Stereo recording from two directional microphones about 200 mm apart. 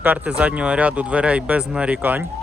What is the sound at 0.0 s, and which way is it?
Speech, 5° right (ahead or behind).